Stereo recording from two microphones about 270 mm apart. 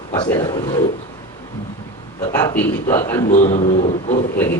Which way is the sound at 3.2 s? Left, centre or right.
Left.